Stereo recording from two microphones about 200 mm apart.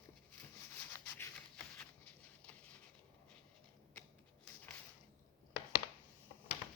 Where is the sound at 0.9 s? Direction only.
10° left (ahead or behind).